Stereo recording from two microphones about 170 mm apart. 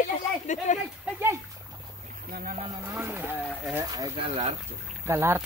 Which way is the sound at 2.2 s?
60° right (ahead or behind).